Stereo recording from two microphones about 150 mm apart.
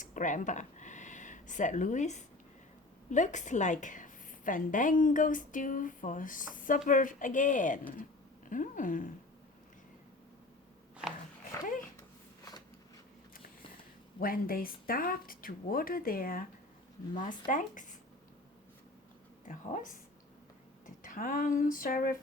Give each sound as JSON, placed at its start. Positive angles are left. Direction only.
{"t": 0.0, "sound": "a woman's voice", "side_deg": 60}
{"t": 14.2, "sound": "speech", "side_deg": 75}
{"t": 17.5, "sound": "a woman's voice", "side_deg": 60}
{"t": 19.5, "sound": "a woman's voice", "side_deg": 60}